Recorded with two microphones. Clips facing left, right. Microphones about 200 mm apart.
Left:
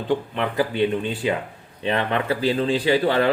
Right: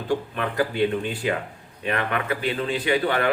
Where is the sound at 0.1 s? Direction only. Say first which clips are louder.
Left 2 dB; 20° left (ahead or behind).